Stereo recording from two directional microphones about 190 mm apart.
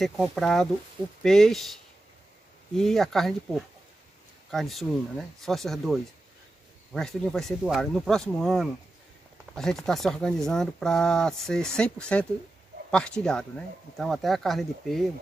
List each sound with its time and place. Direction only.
0.0 s speech: centre (ahead or behind)
2.7 s speech: centre (ahead or behind)